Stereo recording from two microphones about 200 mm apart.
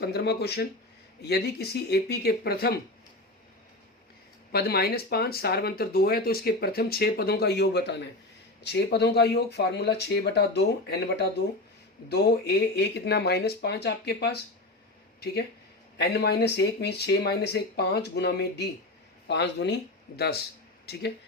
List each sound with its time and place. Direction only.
0.0 s speech: 55° left (ahead or behind)
4.5 s speech: 50° left (ahead or behind)
16.0 s speech: 55° left (ahead or behind)